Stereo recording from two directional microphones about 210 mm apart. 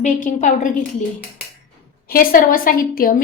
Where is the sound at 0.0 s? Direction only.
40° left (ahead or behind).